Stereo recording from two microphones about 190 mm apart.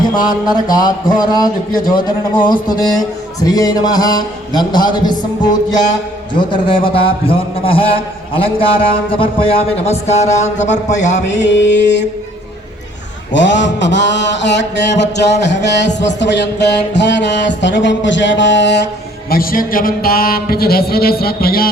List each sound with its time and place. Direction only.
0.2 s a man's voice: 20° left (ahead or behind)
2.5 s a man's voice: 20° left (ahead or behind); by 11.2 s 40° left (ahead or behind)
11.3 s mantra: 70° left (ahead or behind)
13.3 s mantra: 70° left (ahead or behind)
19.3 s speech: 50° left (ahead or behind)